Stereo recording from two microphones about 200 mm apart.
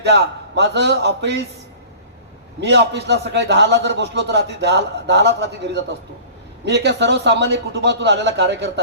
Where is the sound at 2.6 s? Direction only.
60° right (ahead or behind).